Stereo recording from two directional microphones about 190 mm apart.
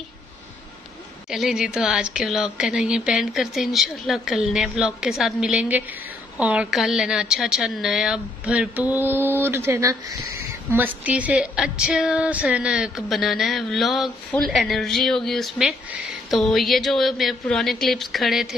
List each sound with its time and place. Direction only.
1.3 s speech: 5° right (ahead or behind)